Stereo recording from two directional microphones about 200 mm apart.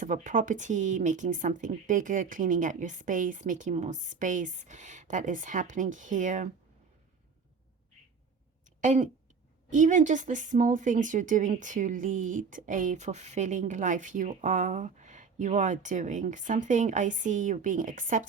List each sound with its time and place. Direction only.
0.0 s a woman's voice: 40° right (ahead or behind)
8.8 s a woman's voice: 40° right (ahead or behind)